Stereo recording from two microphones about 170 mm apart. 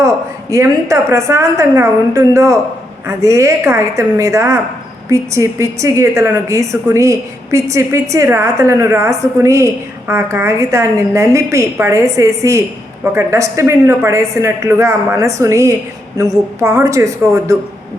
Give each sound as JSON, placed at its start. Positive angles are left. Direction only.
{"t": 0.5, "sound": "a woman's voice", "side_deg": -20}